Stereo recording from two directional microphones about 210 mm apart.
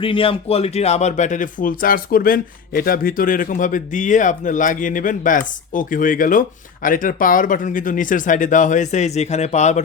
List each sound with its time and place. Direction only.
0.0 s speech: 25° left (ahead or behind)